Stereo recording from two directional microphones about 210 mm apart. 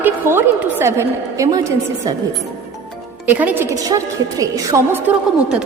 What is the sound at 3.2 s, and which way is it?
A woman's voice, 10° right (ahead or behind).